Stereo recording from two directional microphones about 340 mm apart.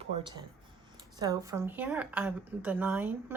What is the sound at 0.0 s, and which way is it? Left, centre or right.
A woman's voice, centre.